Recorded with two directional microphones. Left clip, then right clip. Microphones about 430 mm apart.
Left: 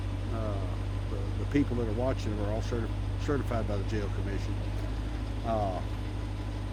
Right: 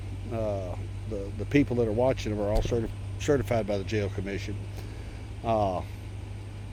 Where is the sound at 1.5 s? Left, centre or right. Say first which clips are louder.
Right 6 dB; right.